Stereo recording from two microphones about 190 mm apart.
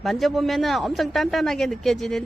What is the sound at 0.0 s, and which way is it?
Speech, centre (ahead or behind).